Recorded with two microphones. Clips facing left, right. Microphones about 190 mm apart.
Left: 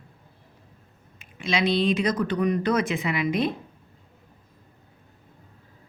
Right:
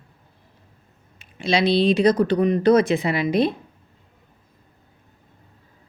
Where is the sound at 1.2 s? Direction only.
30° right (ahead or behind).